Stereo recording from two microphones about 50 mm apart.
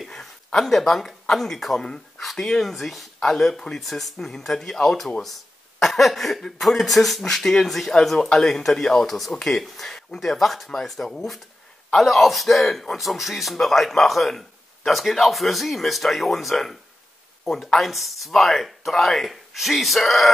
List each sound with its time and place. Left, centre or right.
0.1 s a sound: centre
1.3 s speech: centre
1.8 s speech: centre